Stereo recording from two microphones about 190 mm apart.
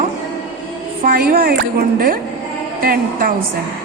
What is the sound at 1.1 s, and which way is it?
Speech, 50° right (ahead or behind).